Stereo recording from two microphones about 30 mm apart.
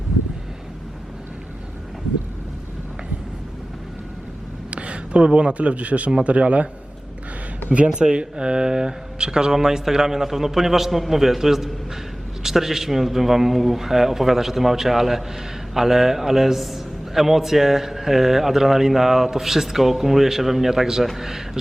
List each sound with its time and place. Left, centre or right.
4.7 s a man's voice: right
7.9 s a man's voice: right; by 21.4 s centre